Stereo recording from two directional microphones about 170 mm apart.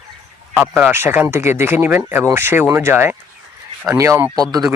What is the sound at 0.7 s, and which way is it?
Speech, 10° right (ahead or behind).